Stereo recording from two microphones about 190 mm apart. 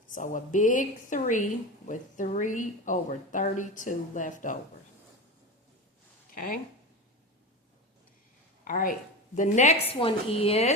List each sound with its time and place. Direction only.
0.1 s a woman's voice: 45° left (ahead or behind)
8.6 s a woman's voice: 45° left (ahead or behind); by 10.7 s 30° left (ahead or behind)